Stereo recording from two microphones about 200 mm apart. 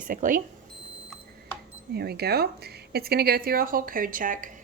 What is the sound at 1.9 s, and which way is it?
A woman's voice, 50° right (ahead or behind).